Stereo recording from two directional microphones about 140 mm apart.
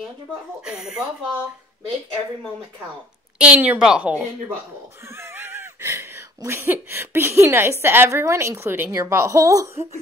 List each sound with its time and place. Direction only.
0.7 s a woman's voice: 5° right (ahead or behind)
3.3 s a woman's voice: 10° right (ahead or behind)
5.1 s a sound: 15° right (ahead or behind)
7.8 s a woman's voice: 15° right (ahead or behind)